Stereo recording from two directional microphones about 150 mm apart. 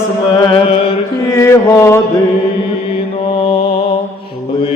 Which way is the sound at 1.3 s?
20° left (ahead or behind).